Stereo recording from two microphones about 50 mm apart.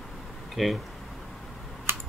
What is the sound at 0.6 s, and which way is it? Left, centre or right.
Speech, centre.